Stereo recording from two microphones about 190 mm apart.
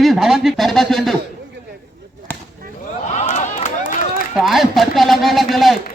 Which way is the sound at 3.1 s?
40° left (ahead or behind).